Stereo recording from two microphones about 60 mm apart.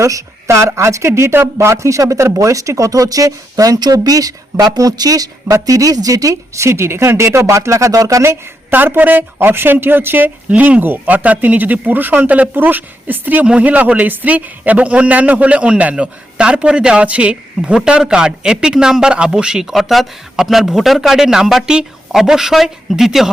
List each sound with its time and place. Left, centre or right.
0.0 s speech: right
5.6 s speech: right
8.7 s a man's voice: right; by 19.6 s centre
19.7 s a man's voice: centre